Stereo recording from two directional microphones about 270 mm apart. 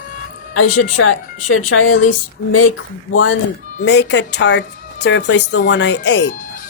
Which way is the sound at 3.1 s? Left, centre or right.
Left.